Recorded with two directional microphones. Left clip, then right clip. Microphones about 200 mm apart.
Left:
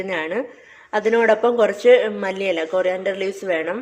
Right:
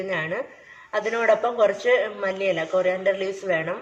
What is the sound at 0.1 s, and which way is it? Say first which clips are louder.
Speech: left 4 dB; 55° left (ahead or behind).